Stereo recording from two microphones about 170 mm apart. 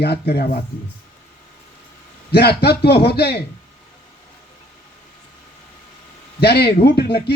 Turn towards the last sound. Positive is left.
turn(degrees=70)  # may be behind; listen again after turning